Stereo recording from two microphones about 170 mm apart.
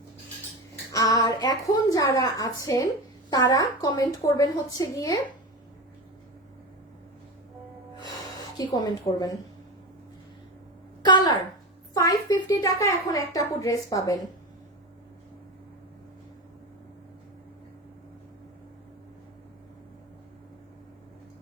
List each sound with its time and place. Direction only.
0.9 s a woman's voice: 20° left (ahead or behind)
7.9 s music: 25° left (ahead or behind)
11.0 s a woman's voice: 25° left (ahead or behind)